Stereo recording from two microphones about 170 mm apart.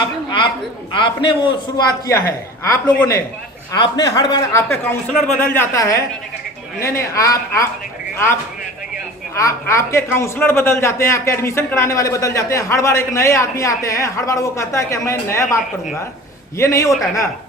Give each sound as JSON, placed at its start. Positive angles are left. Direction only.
{"t": 0.9, "sound": "a man's voice", "side_deg": 30}
{"t": 5.1, "sound": "a man's voice", "side_deg": 5}
{"t": 5.7, "sound": "a man's voice", "side_deg": 20}
{"t": 16.6, "sound": "a man's voice", "side_deg": 15}